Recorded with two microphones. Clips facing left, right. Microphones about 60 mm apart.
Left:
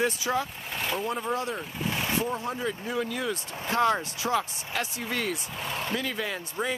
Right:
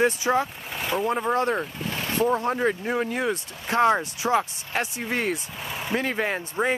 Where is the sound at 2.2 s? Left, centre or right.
Right.